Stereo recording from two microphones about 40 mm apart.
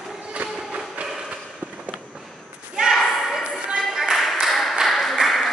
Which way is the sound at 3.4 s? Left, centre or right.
Right.